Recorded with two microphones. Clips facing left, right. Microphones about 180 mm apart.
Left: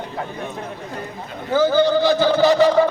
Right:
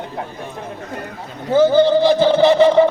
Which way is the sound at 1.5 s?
25° right (ahead or behind).